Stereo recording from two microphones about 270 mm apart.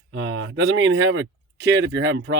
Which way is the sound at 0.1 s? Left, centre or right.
Right.